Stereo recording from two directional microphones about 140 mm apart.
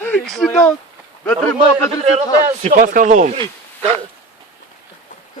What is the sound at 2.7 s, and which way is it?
Speech, 75° right (ahead or behind).